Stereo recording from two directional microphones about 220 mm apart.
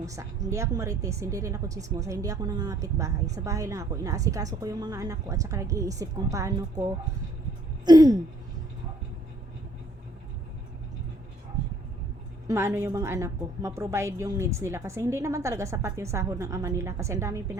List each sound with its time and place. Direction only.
0.0 s a woman's voice: 15° right (ahead or behind)
12.5 s a woman's voice: 10° right (ahead or behind)